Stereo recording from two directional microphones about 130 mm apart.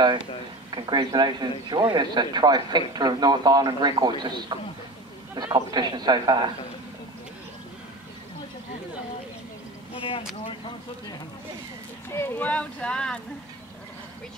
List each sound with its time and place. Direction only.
0.7 s a man's voice: 35° right (ahead or behind)
12.1 s speech: 15° left (ahead or behind)